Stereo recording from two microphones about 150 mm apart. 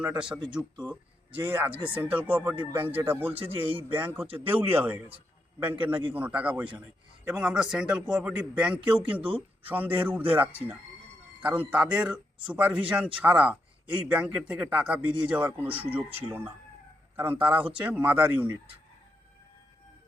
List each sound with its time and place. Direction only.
0.0 s speech: 5° right (ahead or behind)
3.3 s a man's voice: 35° right (ahead or behind)
3.8 s speech: 15° right (ahead or behind)
11.7 s speech: 5° right (ahead or behind)
17.2 s speech: 15° right (ahead or behind)